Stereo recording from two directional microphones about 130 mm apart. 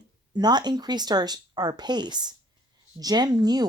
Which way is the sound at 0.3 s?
35° right (ahead or behind).